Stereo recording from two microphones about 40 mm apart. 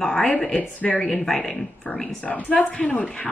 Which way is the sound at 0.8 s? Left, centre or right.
Centre.